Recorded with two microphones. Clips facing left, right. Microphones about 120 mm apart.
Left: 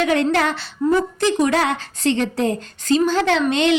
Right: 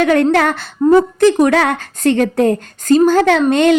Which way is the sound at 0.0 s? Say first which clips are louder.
Right 6 dB; 55° right (ahead or behind).